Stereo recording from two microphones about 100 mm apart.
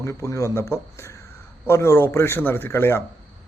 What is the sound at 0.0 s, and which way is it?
Speech, 30° left (ahead or behind).